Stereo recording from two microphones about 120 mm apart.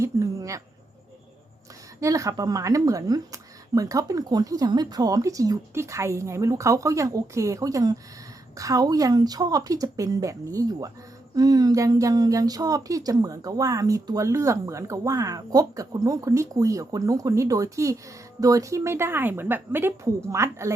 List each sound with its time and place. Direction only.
0.0 s speech: 25° right (ahead or behind)
2.0 s speech: 25° right (ahead or behind)